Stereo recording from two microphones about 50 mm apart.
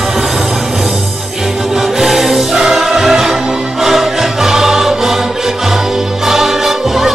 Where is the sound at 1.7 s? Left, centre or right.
Centre.